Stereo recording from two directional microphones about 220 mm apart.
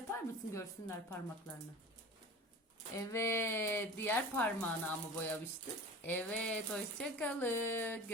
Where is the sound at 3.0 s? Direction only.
15° left (ahead or behind).